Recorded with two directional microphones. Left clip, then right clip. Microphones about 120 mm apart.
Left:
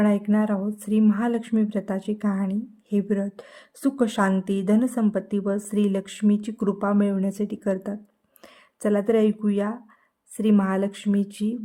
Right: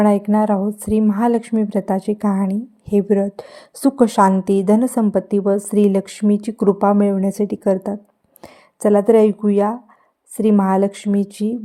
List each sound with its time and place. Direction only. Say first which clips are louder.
0.0 s a woman's voice: right 8 dB; 30° right (ahead or behind)